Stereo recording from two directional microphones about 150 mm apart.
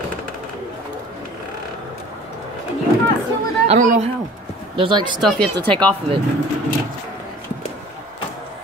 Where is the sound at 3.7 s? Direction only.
50° right (ahead or behind).